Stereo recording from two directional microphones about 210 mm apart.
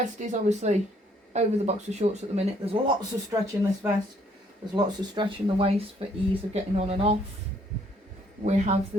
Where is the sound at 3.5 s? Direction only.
10° right (ahead or behind).